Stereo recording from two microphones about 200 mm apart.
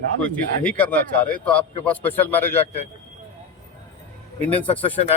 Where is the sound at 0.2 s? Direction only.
5° left (ahead or behind).